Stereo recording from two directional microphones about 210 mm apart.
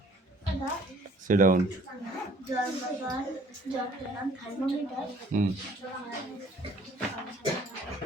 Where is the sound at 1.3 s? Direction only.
40° right (ahead or behind).